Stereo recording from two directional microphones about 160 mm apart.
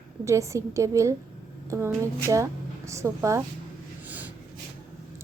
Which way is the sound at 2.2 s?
20° right (ahead or behind).